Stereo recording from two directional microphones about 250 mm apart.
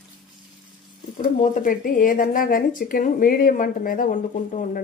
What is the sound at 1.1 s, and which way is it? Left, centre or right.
Speech, left.